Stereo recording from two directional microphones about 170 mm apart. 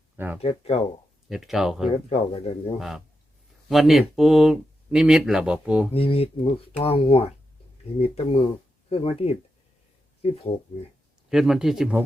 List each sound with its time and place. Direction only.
0.4 s speech: 35° left (ahead or behind)
1.3 s speech: centre (ahead or behind)
1.9 s speech: 35° left (ahead or behind)
2.7 s speech: centre (ahead or behind)
5.9 s speech: 35° left (ahead or behind)
11.3 s speech: 5° right (ahead or behind)